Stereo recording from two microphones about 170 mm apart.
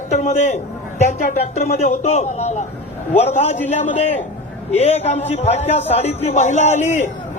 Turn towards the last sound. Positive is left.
turn(degrees=45)  # may be behind; listen again after turning